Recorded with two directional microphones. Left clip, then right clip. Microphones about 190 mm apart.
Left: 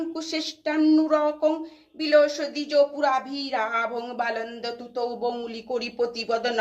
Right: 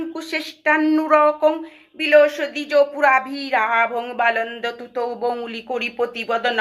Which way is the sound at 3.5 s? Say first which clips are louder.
Right 8 dB; 35° right (ahead or behind).